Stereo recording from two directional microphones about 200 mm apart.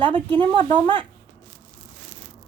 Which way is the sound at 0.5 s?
25° right (ahead or behind).